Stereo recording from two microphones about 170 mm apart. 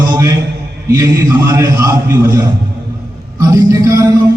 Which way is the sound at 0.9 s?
20° right (ahead or behind).